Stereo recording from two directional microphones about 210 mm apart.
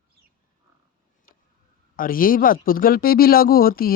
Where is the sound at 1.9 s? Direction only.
40° left (ahead or behind).